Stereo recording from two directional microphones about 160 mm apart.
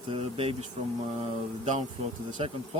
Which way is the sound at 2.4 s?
40° right (ahead or behind).